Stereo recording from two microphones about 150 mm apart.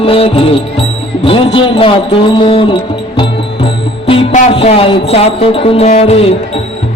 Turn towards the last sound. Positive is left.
turn(degrees=45)  # may be behind; listen again after turning